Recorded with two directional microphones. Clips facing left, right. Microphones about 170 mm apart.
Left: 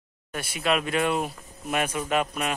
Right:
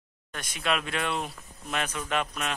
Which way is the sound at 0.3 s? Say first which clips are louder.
Left 4 dB; 10° left (ahead or behind).